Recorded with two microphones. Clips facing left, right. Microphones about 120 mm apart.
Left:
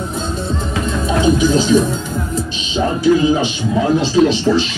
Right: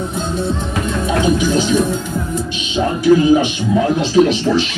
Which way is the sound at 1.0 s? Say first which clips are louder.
Left 2 dB; 35° left (ahead or behind).